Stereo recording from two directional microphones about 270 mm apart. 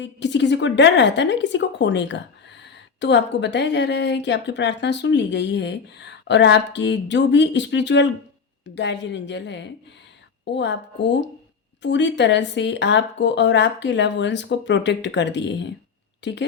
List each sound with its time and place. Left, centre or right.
0.0 s speech: left